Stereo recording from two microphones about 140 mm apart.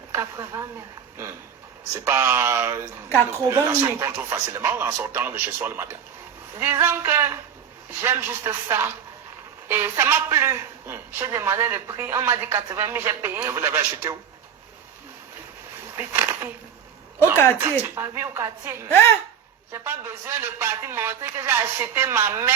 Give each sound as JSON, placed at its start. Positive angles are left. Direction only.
{"t": 0.1, "sound": "speech", "side_deg": -20}
{"t": 2.0, "sound": "a woman's voice", "side_deg": -20}
{"t": 16.0, "sound": "a sound", "side_deg": -20}
{"t": 17.2, "sound": "a sound", "side_deg": 15}
{"t": 17.6, "sound": "a woman's voice", "side_deg": -20}
{"t": 19.7, "sound": "a woman's voice", "side_deg": -15}